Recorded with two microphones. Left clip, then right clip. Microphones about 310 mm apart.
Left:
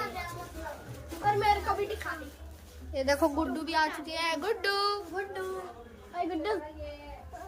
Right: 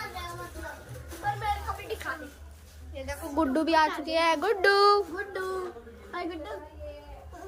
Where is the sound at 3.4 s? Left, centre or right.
Centre.